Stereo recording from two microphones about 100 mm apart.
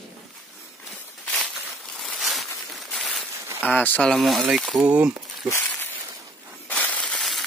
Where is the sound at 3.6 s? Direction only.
15° left (ahead or behind).